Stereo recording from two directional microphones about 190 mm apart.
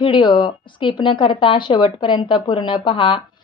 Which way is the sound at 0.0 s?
25° left (ahead or behind).